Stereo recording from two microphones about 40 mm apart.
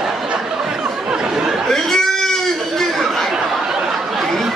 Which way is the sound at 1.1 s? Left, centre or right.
Centre.